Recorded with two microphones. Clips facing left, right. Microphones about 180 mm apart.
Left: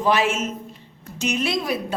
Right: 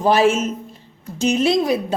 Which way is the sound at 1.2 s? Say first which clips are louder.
Right 7 dB; 30° right (ahead or behind).